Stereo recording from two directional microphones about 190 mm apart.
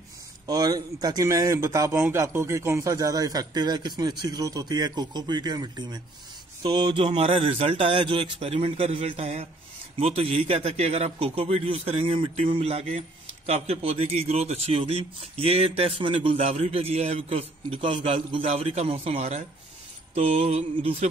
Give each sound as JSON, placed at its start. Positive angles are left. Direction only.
{"t": 0.5, "sound": "a man's voice", "side_deg": -20}